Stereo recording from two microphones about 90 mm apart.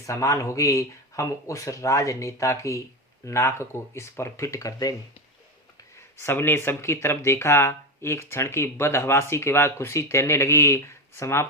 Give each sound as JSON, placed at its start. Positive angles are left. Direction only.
{"t": 0.0, "sound": "speech", "side_deg": 35}
{"t": 6.1, "sound": "speech", "side_deg": 25}